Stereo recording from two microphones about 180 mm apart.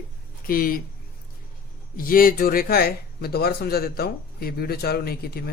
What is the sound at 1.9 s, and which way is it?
Speech, 50° left (ahead or behind).